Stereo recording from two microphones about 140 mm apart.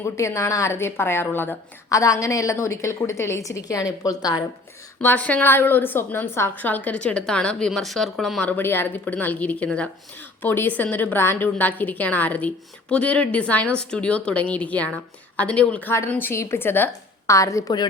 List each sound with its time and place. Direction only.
0.0 s a woman's voice: 20° left (ahead or behind)
4.9 s a woman's voice: 10° left (ahead or behind)